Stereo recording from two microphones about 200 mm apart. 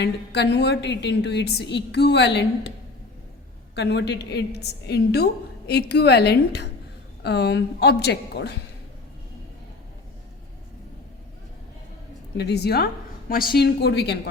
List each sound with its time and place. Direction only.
0.0 s a woman's voice: 60° left (ahead or behind)
3.8 s a woman's voice: 60° left (ahead or behind)
12.4 s a woman's voice: 55° left (ahead or behind)